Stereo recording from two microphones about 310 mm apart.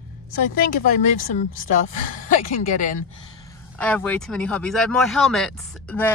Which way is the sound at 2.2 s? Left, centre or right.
Left.